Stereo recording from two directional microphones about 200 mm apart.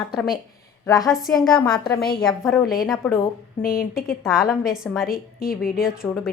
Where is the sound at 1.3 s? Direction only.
10° left (ahead or behind).